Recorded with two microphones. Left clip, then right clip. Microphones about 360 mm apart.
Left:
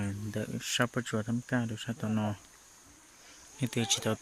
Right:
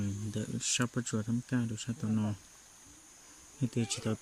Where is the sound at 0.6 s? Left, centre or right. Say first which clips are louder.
Left 3 dB; centre.